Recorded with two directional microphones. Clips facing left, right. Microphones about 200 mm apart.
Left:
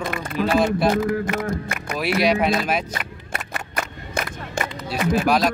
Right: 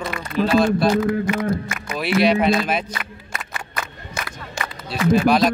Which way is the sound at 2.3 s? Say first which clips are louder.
Right 2 dB; 5° left (ahead or behind).